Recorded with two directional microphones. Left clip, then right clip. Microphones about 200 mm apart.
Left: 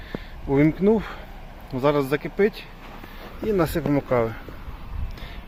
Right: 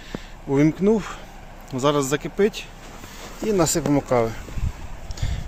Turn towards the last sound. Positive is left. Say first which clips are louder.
# right 4 dB
turn(degrees=-5)  # may be behind; listen again after turning